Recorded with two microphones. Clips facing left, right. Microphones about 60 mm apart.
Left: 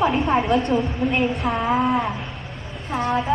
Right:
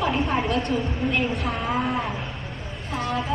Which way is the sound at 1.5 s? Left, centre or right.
Centre.